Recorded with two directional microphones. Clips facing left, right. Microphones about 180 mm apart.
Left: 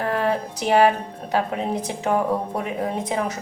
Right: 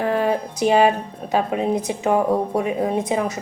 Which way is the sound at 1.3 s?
20° right (ahead or behind).